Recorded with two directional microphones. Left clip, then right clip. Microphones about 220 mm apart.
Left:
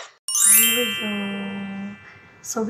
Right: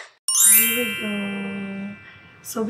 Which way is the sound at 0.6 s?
5° left (ahead or behind).